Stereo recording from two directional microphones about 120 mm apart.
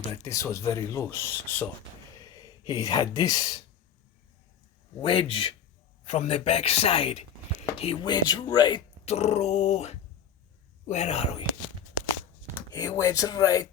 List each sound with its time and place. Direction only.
0.3 s speech: 25° left (ahead or behind)
2.3 s speech: 35° left (ahead or behind)
5.0 s speech: 50° left (ahead or behind)
6.1 s speech: 60° left (ahead or behind)
8.0 s speech: 35° left (ahead or behind)
9.0 s speech: 60° left (ahead or behind)
12.7 s speech: 20° left (ahead or behind)